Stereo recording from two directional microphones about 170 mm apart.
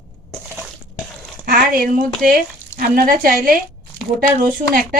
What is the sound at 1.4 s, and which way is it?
A woman's voice, 55° right (ahead or behind).